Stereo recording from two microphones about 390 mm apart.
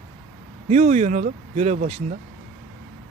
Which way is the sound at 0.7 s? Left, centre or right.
Centre.